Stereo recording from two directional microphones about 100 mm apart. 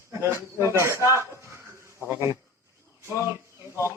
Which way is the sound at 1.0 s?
30° right (ahead or behind).